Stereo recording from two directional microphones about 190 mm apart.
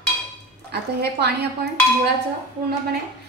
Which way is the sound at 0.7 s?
60° right (ahead or behind).